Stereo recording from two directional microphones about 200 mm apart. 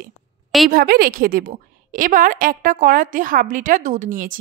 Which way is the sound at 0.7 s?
45° right (ahead or behind).